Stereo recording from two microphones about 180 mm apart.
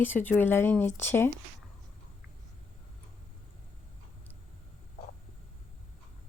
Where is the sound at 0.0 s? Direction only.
10° left (ahead or behind).